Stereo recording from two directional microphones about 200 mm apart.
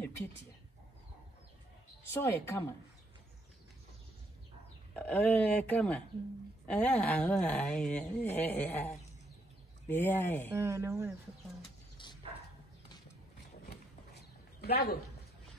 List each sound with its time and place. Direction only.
2.1 s speech: 10° left (ahead or behind)
4.9 s speech: 5° left (ahead or behind)
9.8 s speech: 10° left (ahead or behind)
10.5 s speech: 15° right (ahead or behind)
12.0 s bow-wow: 25° left (ahead or behind)
13.7 s a sound: 55° left (ahead or behind)